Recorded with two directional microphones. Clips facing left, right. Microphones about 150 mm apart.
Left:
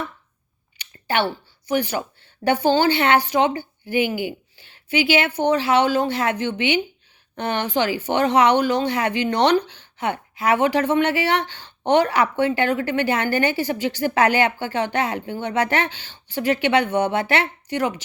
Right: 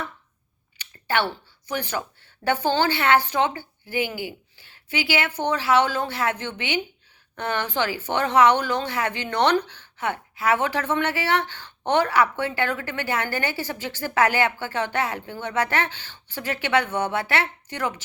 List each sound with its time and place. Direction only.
0.8 s speech: 15° left (ahead or behind)